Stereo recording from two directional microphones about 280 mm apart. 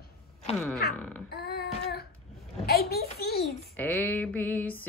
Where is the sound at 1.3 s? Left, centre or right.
Left.